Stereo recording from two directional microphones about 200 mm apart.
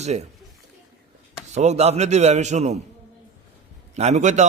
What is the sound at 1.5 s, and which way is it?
A man's voice, 35° right (ahead or behind).